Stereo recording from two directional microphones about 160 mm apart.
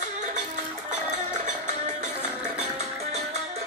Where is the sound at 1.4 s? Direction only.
50° right (ahead or behind).